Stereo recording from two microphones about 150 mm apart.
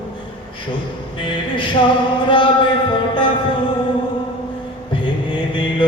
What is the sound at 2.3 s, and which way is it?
Music, 35° left (ahead or behind).